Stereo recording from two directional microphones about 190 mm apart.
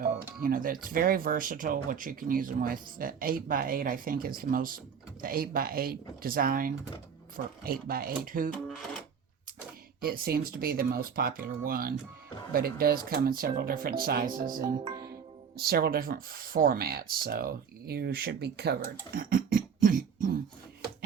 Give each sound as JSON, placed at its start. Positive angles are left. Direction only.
{"t": 0.4, "sound": "speech", "side_deg": -45}
{"t": 10.0, "sound": "speech", "side_deg": -50}
{"t": 19.1, "sound": "a sound", "side_deg": -50}